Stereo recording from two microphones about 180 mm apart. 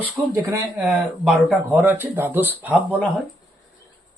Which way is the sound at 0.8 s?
Centre (ahead or behind).